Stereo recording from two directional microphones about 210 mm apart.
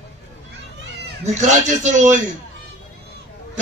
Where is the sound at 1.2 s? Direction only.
35° right (ahead or behind).